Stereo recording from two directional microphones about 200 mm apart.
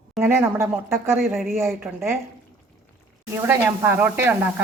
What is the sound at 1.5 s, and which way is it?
Sizzle, 15° right (ahead or behind).